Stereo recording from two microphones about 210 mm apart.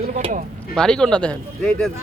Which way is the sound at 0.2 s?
30° right (ahead or behind).